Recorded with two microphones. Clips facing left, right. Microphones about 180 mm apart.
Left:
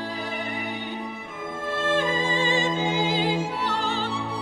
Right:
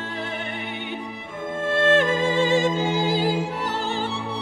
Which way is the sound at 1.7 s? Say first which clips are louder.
Right 6 dB; 90° right.